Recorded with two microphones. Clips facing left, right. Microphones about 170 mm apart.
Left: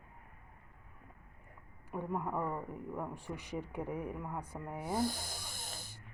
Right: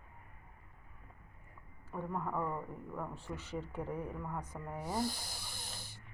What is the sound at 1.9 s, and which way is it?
A man's voice, 15° left (ahead or behind).